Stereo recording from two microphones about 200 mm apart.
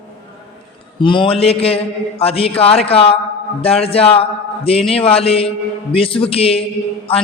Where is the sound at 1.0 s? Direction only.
25° left (ahead or behind).